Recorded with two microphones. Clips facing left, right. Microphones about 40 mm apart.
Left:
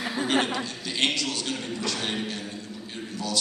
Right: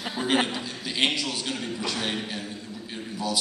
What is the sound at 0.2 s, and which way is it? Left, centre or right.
A man's voice, centre.